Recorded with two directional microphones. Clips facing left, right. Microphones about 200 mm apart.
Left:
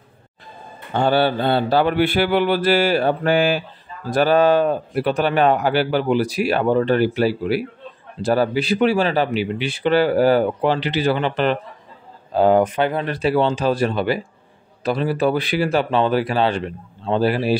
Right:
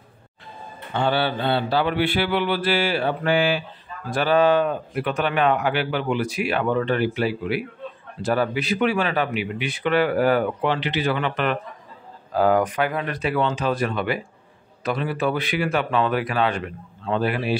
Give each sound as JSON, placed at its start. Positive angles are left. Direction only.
{"t": 0.9, "sound": "mantra", "side_deg": 40}